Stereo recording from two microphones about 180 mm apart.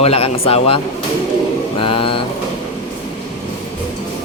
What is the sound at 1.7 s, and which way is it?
Bird, 30° left (ahead or behind).